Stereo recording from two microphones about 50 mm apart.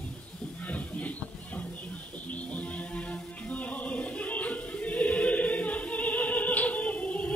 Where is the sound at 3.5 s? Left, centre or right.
Left.